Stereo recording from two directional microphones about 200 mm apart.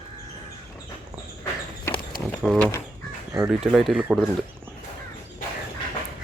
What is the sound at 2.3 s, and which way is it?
Speech, 5° left (ahead or behind).